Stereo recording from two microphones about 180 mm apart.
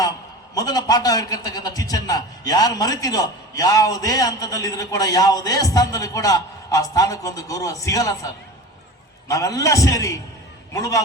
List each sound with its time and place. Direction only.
0.5 s a man's voice: 20° left (ahead or behind)
9.3 s a man's voice: 20° left (ahead or behind)